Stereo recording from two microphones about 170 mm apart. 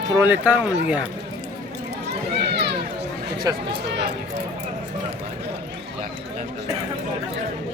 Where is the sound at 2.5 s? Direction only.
80° right.